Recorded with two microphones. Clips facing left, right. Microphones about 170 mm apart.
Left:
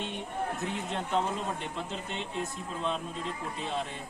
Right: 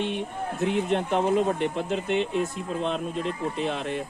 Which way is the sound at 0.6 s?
65° right (ahead or behind).